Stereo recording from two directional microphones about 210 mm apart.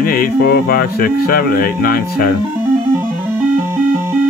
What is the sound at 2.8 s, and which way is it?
Music, 10° right (ahead or behind).